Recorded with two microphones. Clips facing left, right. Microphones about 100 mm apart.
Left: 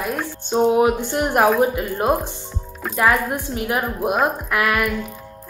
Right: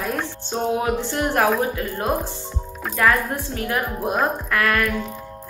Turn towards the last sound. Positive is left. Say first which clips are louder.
# left 1 dB
turn(degrees=15)  # may be behind; listen again after turning